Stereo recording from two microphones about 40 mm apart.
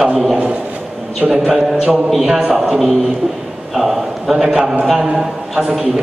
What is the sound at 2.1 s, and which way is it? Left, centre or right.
Speech, centre.